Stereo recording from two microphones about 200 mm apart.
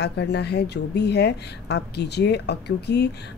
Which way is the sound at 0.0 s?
55° left (ahead or behind).